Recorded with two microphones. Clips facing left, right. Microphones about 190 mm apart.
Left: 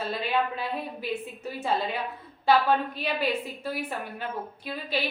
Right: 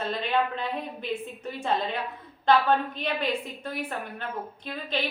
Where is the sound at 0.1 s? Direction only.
5° left (ahead or behind).